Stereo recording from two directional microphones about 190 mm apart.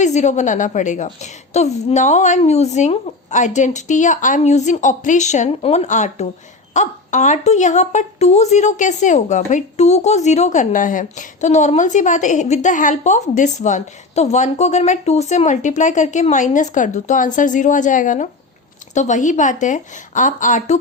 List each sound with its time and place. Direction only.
0.0 s a woman's voice: 40° left (ahead or behind)